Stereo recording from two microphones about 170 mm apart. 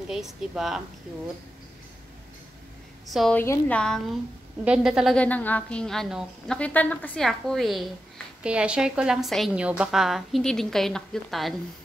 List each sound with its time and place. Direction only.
0.1 s a woman's voice: centre (ahead or behind)
3.1 s a woman's voice: centre (ahead or behind)
3.3 s a woman's voice: 10° left (ahead or behind)